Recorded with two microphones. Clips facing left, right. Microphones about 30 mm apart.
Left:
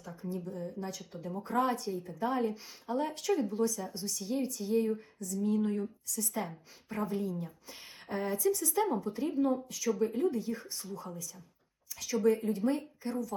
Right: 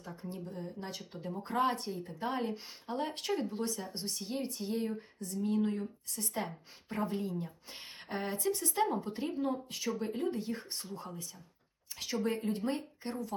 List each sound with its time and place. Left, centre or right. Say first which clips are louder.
0.0 s speech: left 4 dB; right